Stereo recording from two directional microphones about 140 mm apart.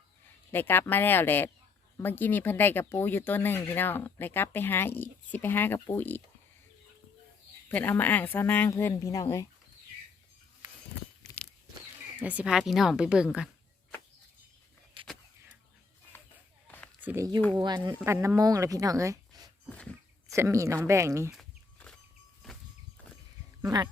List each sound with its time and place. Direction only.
0.5 s speech: 15° left (ahead or behind)
7.7 s speech: 10° left (ahead or behind)
12.2 s speech: 10° right (ahead or behind)
15.0 s a sound: 35° right (ahead or behind)
16.6 s a sound: 10° left (ahead or behind)
17.0 s a sound: 15° right (ahead or behind)
17.6 s speech: 30° right (ahead or behind)
19.7 s speech: 10° left (ahead or behind)
20.2 s speech: 20° right (ahead or behind)
21.3 s chicken: 5° left (ahead or behind)